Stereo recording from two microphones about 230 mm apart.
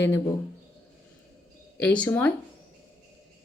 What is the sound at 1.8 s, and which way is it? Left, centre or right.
Speech, centre.